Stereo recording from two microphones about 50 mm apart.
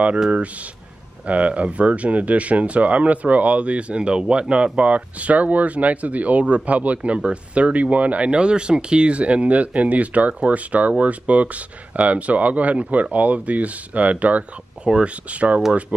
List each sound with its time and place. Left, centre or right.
1.2 s speech: right